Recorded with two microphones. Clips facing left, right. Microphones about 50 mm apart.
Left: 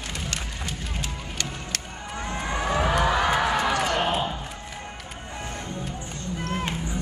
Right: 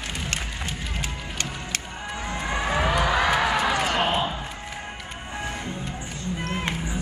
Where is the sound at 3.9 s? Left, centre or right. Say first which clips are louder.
Right 1 dB; right.